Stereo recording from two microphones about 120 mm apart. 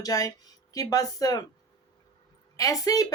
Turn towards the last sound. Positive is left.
turn(degrees=30)  # may be behind; listen again after turning